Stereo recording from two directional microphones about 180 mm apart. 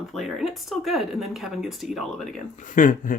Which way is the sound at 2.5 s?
45° left (ahead or behind).